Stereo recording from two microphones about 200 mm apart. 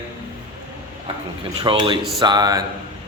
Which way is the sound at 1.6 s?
25° right (ahead or behind).